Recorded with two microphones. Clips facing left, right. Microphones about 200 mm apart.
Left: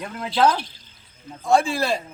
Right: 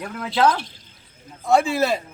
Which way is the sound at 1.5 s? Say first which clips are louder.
Right 1 dB; 20° right (ahead or behind).